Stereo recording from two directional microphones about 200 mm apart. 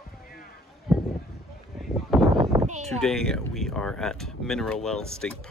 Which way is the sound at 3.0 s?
Centre (ahead or behind).